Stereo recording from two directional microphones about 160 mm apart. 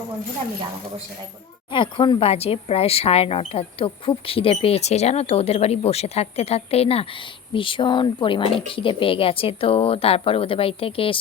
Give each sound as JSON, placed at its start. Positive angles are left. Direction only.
{"t": 1.7, "sound": "speech", "side_deg": 30}